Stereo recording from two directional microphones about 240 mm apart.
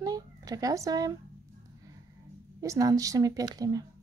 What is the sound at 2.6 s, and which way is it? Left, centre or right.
Speech, centre.